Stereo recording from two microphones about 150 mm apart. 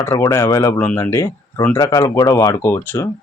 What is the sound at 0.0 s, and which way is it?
Speech, 20° left (ahead or behind).